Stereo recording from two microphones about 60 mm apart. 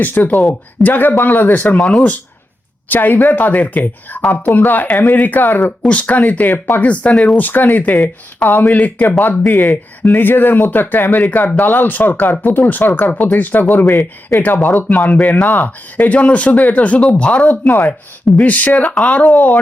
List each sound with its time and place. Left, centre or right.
0.0 s speech: left; by 2.1 s centre
2.9 s speech: left